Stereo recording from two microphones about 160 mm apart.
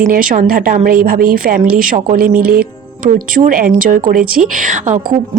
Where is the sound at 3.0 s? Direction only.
60° right (ahead or behind).